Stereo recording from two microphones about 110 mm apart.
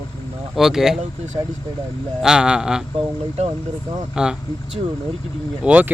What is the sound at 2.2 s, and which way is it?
Speech, 5° right (ahead or behind).